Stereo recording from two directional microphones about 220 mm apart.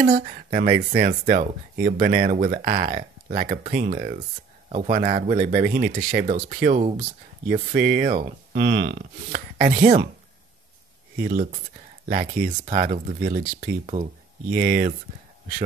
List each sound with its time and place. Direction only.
0.0 s speech: 35° right (ahead or behind)
8.5 s speech: 45° right (ahead or behind)
12.1 s speech: 40° right (ahead or behind)
14.5 s speech: 40° right (ahead or behind)